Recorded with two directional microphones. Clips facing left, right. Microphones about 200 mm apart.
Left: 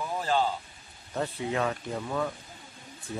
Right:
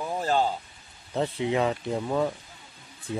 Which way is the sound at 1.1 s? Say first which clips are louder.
Right 4 dB; 20° right (ahead or behind).